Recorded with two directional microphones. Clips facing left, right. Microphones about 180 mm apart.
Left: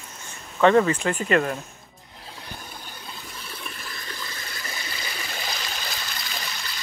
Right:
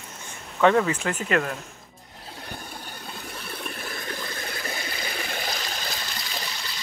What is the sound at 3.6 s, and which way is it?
Water, 55° right (ahead or behind).